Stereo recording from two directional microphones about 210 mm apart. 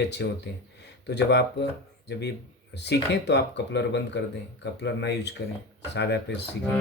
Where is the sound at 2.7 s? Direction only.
55° left (ahead or behind).